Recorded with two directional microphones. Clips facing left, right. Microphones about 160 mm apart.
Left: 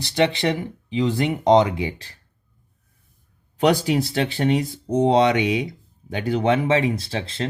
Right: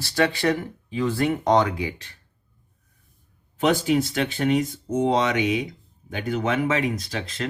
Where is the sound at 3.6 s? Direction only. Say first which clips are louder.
Left 2 dB; 35° left (ahead or behind).